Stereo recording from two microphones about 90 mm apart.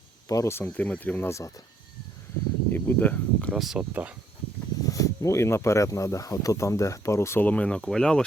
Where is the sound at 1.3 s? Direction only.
35° left (ahead or behind).